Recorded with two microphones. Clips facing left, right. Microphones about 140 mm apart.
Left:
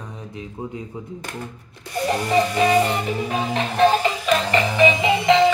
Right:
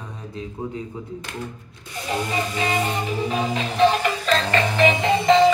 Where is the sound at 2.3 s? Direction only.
65° left (ahead or behind).